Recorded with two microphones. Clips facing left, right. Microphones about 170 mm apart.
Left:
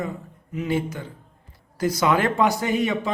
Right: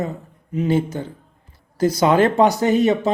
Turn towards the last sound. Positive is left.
turn(degrees=-35)  # may be behind; listen again after turning